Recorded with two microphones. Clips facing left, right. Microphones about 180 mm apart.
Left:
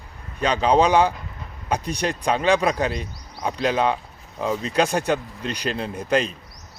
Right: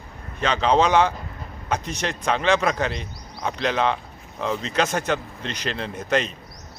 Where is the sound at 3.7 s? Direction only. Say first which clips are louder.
Left 1 dB; 10° left (ahead or behind).